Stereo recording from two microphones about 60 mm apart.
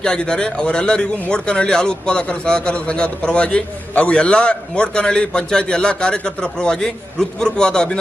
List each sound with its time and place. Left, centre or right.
0.0 s a man's voice: centre